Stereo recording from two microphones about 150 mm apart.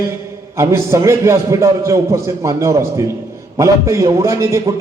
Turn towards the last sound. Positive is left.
turn(degrees=-20)  # may be behind; listen again after turning